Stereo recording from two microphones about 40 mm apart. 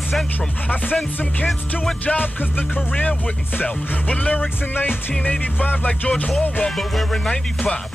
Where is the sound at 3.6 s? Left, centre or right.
Left.